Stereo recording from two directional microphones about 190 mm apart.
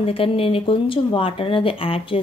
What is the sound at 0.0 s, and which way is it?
A woman's voice, 30° left (ahead or behind).